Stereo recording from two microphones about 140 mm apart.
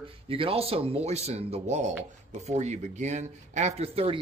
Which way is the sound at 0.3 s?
45° right (ahead or behind).